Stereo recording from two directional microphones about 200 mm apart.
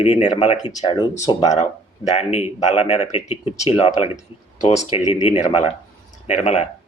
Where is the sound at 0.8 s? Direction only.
20° left (ahead or behind).